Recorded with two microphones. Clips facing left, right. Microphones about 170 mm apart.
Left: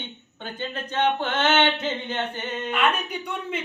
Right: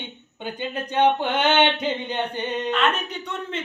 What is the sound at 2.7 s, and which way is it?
Speech, 10° left (ahead or behind).